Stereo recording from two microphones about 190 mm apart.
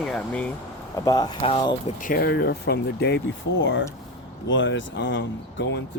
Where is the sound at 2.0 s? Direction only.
50° left (ahead or behind).